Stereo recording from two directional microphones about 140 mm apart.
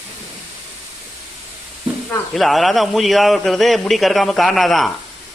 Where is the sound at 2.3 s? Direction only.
Centre (ahead or behind).